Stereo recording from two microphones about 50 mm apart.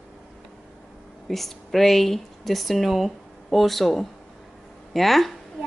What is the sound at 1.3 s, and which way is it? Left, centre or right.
Speech, centre.